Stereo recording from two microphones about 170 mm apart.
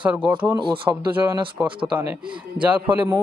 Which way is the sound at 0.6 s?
30° right (ahead or behind).